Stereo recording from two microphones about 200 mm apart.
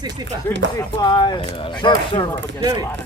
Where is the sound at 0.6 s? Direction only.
65° right (ahead or behind).